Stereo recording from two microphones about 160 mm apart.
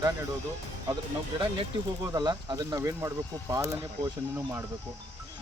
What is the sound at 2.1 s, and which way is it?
Speech, 25° right (ahead or behind).